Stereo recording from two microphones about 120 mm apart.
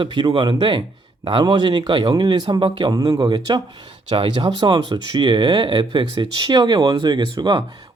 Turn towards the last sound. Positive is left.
turn(degrees=-40)  # may be behind; listen again after turning